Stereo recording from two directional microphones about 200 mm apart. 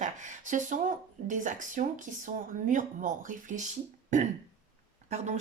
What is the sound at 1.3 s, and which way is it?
Speech, 40° right (ahead or behind).